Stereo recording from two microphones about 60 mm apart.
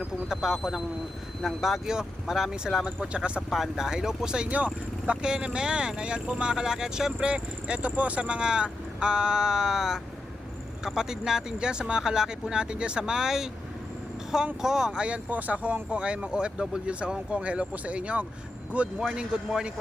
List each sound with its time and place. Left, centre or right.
0.0 s speech: centre
3.1 s speech: centre
3.5 s speech: centre
4.4 s speech: right
14.6 s speech: centre